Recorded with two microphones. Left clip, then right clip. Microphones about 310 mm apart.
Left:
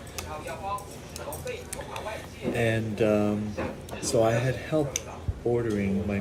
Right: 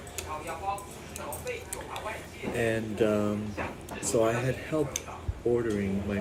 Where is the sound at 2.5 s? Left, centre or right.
Centre.